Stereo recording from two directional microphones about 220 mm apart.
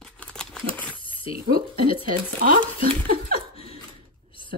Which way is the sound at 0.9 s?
25° left (ahead or behind).